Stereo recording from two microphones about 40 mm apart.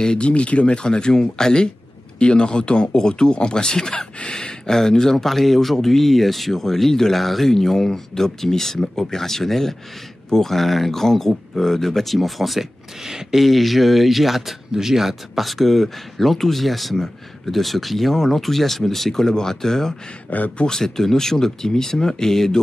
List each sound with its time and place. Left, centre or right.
0.0 s speech: left
0.3 s speech: left; by 20.0 s centre
20.2 s speech: left
20.6 s speech: centre